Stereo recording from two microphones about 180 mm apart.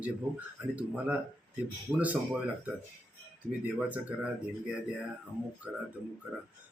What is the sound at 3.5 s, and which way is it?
Speech, 10° right (ahead or behind).